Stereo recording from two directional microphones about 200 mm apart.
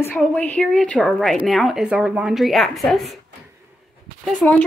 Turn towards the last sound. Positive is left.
turn(degrees=5)  # may be behind; listen again after turning